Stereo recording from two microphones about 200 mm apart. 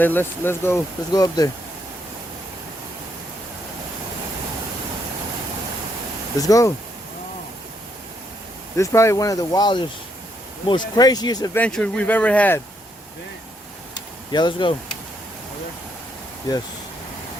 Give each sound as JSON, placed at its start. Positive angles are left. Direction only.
{"t": 0.0, "sound": "speech", "side_deg": 10}
{"t": 6.4, "sound": "speech", "side_deg": 15}
{"t": 8.7, "sound": "speech", "side_deg": 15}
{"t": 11.6, "sound": "speech", "side_deg": 5}
{"t": 14.3, "sound": "speech", "side_deg": 25}
{"t": 16.5, "sound": "speech", "side_deg": 20}